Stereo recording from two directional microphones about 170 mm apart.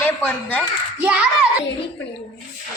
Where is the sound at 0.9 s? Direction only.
10° right (ahead or behind).